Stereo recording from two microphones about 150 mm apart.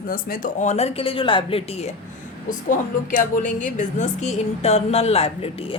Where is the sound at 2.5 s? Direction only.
65° left (ahead or behind).